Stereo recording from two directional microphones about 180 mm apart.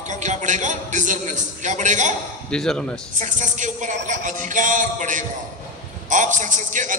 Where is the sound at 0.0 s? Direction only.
40° right (ahead or behind).